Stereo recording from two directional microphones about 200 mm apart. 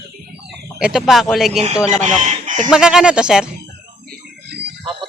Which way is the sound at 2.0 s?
35° right (ahead or behind).